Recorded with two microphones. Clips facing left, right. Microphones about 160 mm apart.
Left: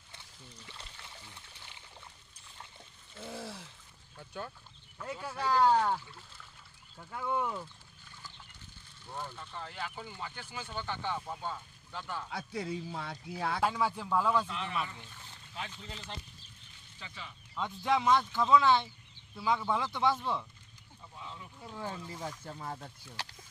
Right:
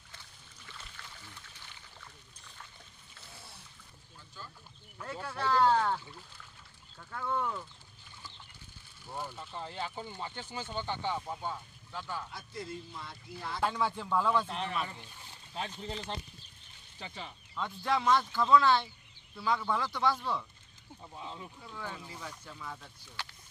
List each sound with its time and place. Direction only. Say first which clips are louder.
0.7 s boat: even; 25° left (ahead or behind)
3.3 s a sound: left 13 dB; 90° left
4.2 s a sound: left 9 dB; 65° left (ahead or behind)
5.2 s a man's voice: even; 10° left (ahead or behind)
7.0 s a man's voice: left 1 dB; 15° left (ahead or behind)
9.1 s speech: right 1 dB; 10° right (ahead or behind)
12.3 s speech: left 5 dB; 70° left (ahead or behind); by 13.6 s 90° left
13.6 s a man's voice: right 1 dB; 5° left (ahead or behind)
14.5 s speech: right 1 dB; 40° right (ahead or behind)
17.6 s a man's voice: left 1 dB; 15° left (ahead or behind)
21.1 s speech: right 3 dB; 25° right (ahead or behind)
21.6 s speech: left 3 dB; 30° left (ahead or behind)
22.4 s speech: left 4 dB; 45° left (ahead or behind)